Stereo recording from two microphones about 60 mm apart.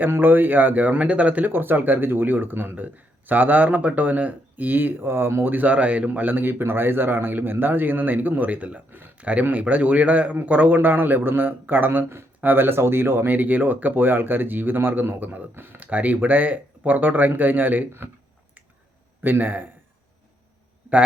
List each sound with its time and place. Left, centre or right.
0.0 s a man's voice: right
5.5 s a man's voice: right
19.2 s a man's voice: right